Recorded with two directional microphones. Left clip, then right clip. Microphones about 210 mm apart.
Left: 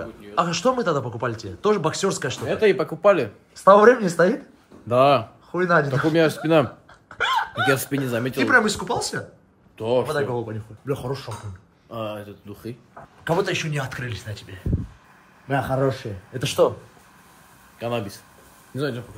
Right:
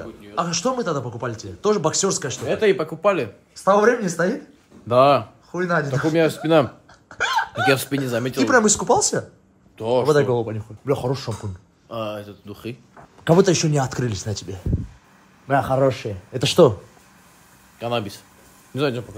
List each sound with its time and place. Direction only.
0.0 s a man's voice: centre (ahead or behind)
10.1 s speech: 40° right (ahead or behind)
11.9 s speech: 10° right (ahead or behind)
13.5 s speech: 20° right (ahead or behind)
15.5 s a man's voice: centre (ahead or behind)
16.3 s speech: 45° right (ahead or behind)
17.7 s a man's voice: 5° right (ahead or behind)
18.8 s speech: 30° right (ahead or behind)